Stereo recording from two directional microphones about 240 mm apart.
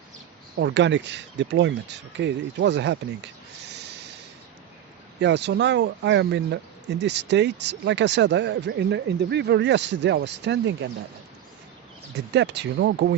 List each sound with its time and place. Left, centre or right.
0.6 s speech: right
5.2 s speech: right
12.1 s speech: right